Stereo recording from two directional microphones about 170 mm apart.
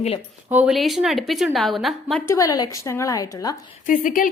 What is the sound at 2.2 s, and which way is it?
A woman's voice, 20° left (ahead or behind).